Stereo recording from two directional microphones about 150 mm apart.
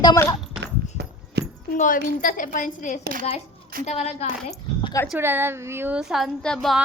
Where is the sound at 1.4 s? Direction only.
90° right.